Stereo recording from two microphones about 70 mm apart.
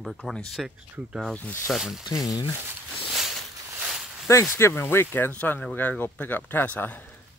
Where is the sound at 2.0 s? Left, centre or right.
Left.